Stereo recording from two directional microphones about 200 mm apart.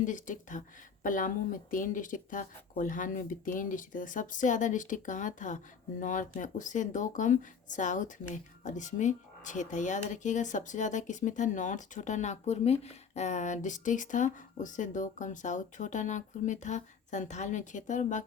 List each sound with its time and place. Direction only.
0.0 s speech: 40° left (ahead or behind)